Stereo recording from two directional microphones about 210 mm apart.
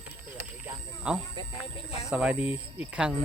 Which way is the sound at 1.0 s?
5° right (ahead or behind).